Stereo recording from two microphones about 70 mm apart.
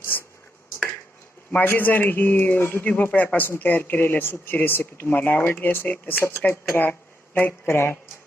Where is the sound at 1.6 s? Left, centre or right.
Left.